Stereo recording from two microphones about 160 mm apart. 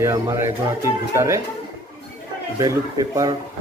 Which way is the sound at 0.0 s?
20° right (ahead or behind).